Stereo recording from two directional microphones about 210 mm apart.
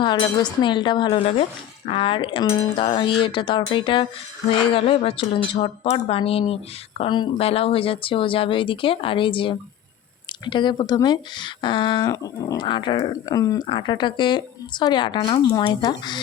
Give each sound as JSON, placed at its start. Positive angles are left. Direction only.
{"t": 0.6, "sound": "speech", "side_deg": 20}